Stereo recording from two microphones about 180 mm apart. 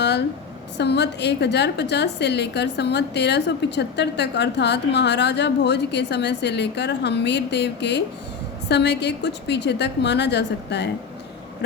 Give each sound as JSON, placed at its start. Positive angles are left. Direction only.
{"t": 0.8, "sound": "a woman's voice", "side_deg": 70}